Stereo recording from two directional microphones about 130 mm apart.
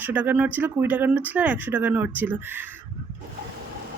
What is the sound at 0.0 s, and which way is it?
Speech, 15° right (ahead or behind).